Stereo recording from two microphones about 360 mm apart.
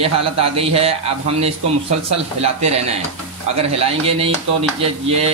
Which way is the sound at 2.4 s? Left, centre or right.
Centre.